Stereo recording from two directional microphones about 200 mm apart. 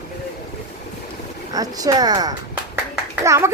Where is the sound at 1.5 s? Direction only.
20° right (ahead or behind).